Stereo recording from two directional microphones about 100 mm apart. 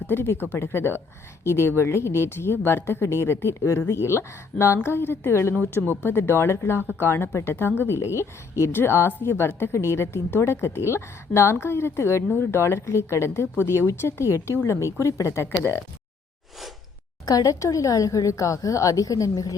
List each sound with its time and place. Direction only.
0.1 s speech: 20° left (ahead or behind)
17.2 s speech: 35° left (ahead or behind)